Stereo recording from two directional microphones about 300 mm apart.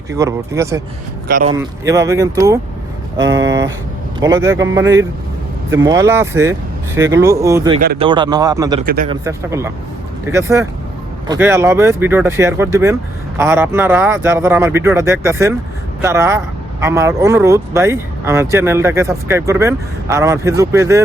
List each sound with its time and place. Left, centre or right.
0.1 s speech: centre
1.3 s speech: right
1.5 s speech: centre